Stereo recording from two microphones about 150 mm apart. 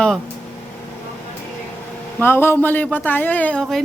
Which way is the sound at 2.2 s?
15° left (ahead or behind).